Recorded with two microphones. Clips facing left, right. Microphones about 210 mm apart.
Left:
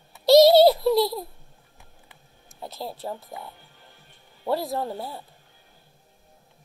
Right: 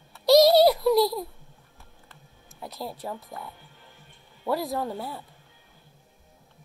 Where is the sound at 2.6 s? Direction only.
25° left (ahead or behind).